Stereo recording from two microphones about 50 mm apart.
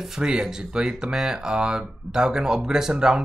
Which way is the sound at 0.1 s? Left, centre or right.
Centre.